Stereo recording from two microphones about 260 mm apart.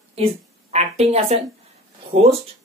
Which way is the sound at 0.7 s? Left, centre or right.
Right.